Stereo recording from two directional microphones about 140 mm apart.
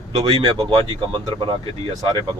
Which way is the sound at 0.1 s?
30° right (ahead or behind).